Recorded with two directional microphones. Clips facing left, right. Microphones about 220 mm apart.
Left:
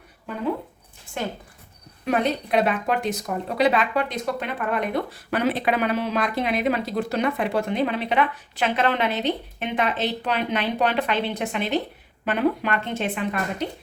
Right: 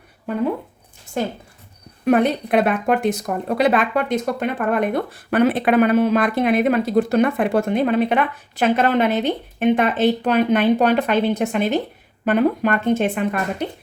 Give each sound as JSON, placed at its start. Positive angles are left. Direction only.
{"t": 1.2, "sound": "speech", "side_deg": -40}
{"t": 2.0, "sound": "speech", "side_deg": -55}